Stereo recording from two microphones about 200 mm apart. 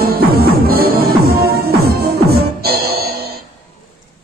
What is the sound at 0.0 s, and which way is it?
Music, 50° right (ahead or behind).